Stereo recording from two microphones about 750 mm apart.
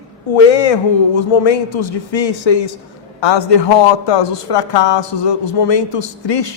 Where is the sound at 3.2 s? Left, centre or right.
Left.